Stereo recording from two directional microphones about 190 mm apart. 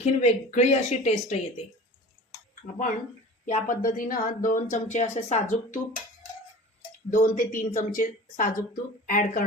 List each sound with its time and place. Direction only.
0.0 s speech: 35° left (ahead or behind)
3.4 s a woman's voice: 45° left (ahead or behind)
7.1 s a woman's voice: 45° left (ahead or behind)